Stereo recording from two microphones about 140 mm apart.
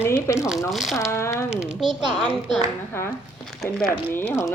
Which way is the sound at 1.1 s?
20° left (ahead or behind).